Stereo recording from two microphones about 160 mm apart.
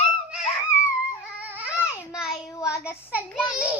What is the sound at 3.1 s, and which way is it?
Child singing, 5° right (ahead or behind).